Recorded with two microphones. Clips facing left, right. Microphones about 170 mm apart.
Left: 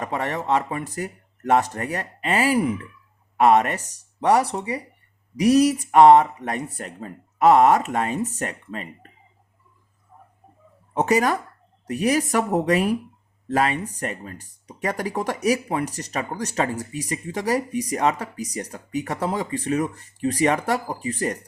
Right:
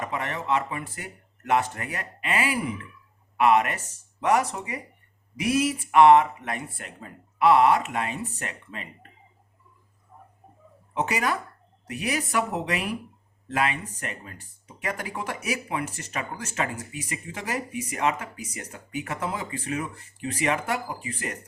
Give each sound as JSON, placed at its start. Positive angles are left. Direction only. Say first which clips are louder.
{"t": 0.0, "sound": "speech", "louder": "left 4 dB", "side_deg": 40}
{"t": 10.9, "sound": "speech", "louder": "left 7 dB", "side_deg": 40}